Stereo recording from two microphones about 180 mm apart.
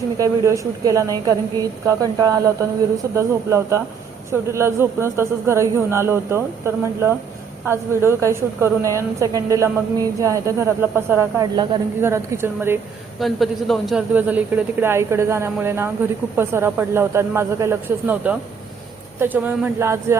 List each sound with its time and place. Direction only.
0.2 s a woman's voice: 15° right (ahead or behind)
13.1 s a woman's voice: centre (ahead or behind)